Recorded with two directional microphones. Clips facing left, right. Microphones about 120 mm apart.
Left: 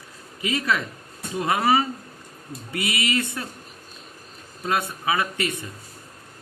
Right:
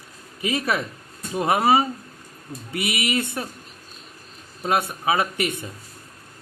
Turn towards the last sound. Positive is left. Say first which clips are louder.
# right 2 dB
turn(degrees=-20)  # may be behind; listen again after turning